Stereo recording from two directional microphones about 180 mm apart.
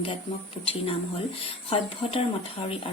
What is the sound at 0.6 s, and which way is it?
A woman's voice, 30° left (ahead or behind).